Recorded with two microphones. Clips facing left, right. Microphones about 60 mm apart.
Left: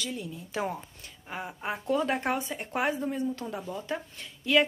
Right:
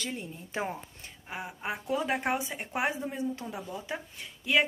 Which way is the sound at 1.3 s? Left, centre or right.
Centre.